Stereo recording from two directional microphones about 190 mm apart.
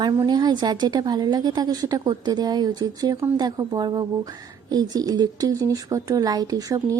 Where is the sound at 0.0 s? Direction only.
20° right (ahead or behind).